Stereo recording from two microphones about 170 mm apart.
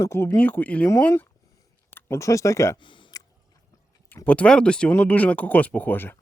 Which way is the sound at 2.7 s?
30° left (ahead or behind).